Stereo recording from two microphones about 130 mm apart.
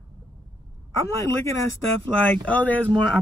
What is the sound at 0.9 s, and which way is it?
A man's voice, 20° left (ahead or behind).